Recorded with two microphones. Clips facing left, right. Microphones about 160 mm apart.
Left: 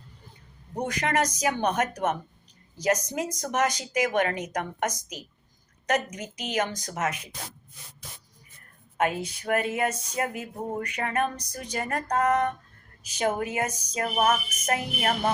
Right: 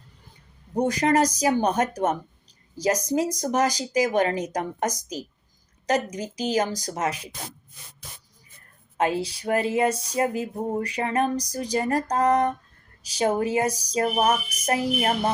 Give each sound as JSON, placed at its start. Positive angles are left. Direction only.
{"t": 0.8, "sound": "speech", "side_deg": -35}
{"t": 9.0, "sound": "speech", "side_deg": -30}